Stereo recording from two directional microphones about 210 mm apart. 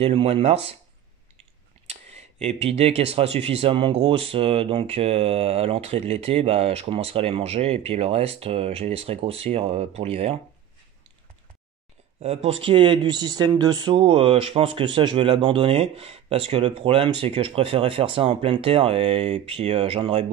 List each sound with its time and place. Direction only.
0.0 s speech: 25° right (ahead or behind)
1.9 s a sound: 30° right (ahead or behind)
2.4 s speech: 30° right (ahead or behind)
12.2 s speech: 30° right (ahead or behind)